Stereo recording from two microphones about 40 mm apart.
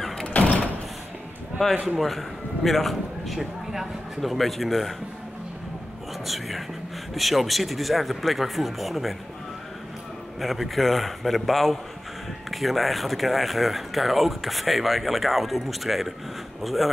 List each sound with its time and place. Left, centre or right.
0.3 s door: left
2.0 s a man's voice: centre
3.3 s speech: centre
6.2 s speech: centre
10.4 s speech: centre